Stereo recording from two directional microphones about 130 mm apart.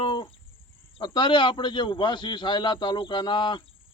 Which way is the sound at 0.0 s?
40° left (ahead or behind).